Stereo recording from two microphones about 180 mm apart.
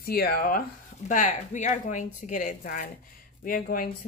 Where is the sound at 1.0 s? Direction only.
45° left (ahead or behind).